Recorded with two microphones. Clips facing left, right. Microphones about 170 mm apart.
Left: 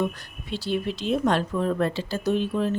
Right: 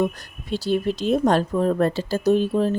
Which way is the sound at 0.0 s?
40° right (ahead or behind).